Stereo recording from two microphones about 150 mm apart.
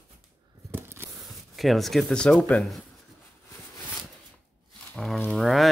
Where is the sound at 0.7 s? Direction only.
15° right (ahead or behind).